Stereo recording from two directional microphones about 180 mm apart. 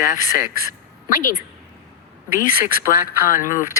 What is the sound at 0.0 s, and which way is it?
Speech, 45° left (ahead or behind).